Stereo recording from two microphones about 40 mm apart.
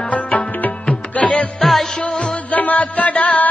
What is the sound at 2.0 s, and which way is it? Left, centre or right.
Music, left.